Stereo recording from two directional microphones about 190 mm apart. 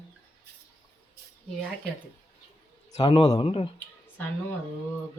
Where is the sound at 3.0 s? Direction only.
25° left (ahead or behind).